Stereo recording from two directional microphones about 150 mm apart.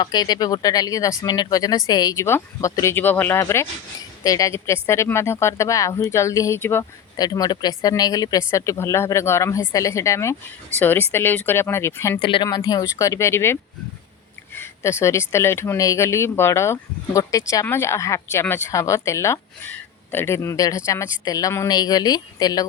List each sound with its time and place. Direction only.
0.0 s speech: 25° left (ahead or behind)
12.2 s speech: 30° left (ahead or behind)